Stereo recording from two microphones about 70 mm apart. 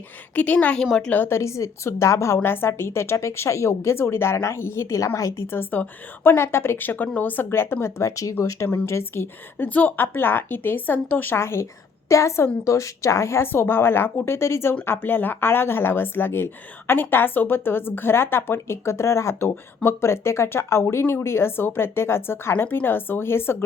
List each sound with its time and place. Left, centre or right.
0.3 s a woman's voice: left
1.3 s speech: left